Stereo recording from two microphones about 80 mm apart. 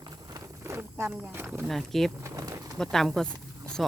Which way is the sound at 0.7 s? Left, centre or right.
Right.